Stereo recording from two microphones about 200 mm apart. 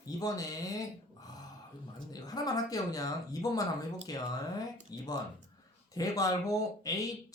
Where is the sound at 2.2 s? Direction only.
20° left (ahead or behind).